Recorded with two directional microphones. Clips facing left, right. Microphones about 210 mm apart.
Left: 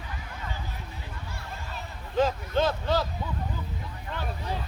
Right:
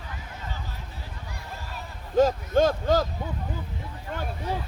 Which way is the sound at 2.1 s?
45° right (ahead or behind).